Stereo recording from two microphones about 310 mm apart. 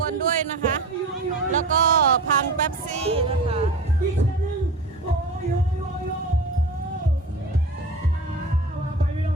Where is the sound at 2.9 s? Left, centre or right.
Centre.